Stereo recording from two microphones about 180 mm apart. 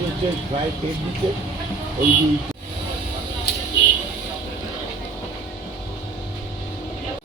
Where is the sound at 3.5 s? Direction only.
65° left (ahead or behind).